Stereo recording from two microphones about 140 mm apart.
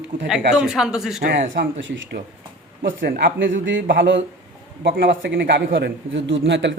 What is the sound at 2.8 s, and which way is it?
A man's voice, 90° right.